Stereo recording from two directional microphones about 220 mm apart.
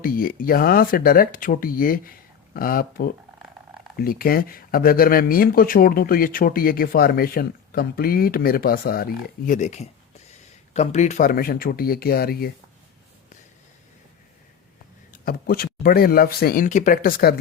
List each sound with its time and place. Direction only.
0.0 s speech: 40° left (ahead or behind)
15.1 s speech: 40° left (ahead or behind)